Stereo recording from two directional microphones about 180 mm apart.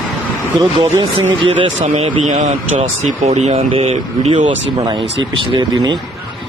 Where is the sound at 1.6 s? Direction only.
35° right (ahead or behind).